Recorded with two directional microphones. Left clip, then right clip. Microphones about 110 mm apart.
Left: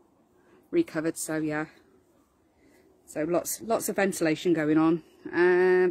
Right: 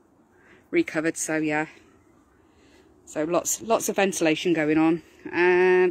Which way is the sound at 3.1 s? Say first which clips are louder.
Right 3 dB; 5° left (ahead or behind).